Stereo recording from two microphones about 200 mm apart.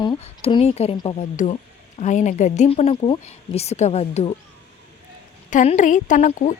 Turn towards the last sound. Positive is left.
turn(degrees=40)  # may be behind; listen again after turning